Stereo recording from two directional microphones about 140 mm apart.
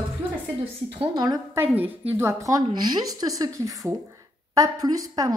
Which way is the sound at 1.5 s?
15° right (ahead or behind).